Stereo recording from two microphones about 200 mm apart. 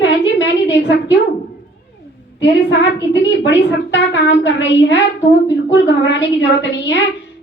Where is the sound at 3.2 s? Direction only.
60° left (ahead or behind).